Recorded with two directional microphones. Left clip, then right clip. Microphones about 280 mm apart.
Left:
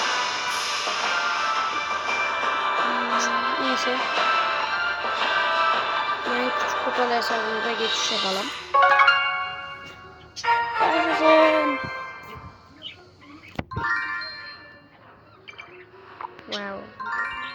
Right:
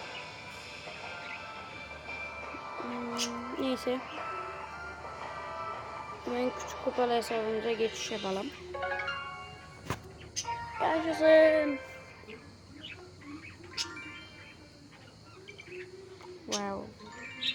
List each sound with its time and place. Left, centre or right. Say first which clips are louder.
0.0 s music: left 19 dB; left
13.8 s music: left 19 dB; left
16.5 s music: left 3 dB; centre
17.1 s music: left 18 dB; right